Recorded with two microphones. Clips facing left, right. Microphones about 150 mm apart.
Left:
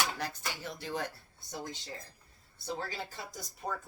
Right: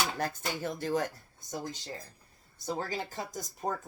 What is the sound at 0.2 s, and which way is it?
Speech, 50° right (ahead or behind).